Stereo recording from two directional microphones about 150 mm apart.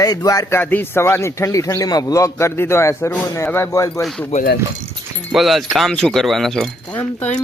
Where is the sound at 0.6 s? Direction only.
10° left (ahead or behind).